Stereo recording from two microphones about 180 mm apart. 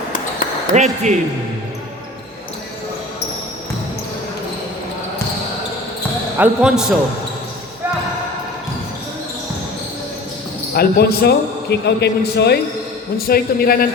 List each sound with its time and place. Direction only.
0.7 s speech: 40° right (ahead or behind)
6.3 s speech: 5° right (ahead or behind)
10.8 s a man's voice: 60° left (ahead or behind)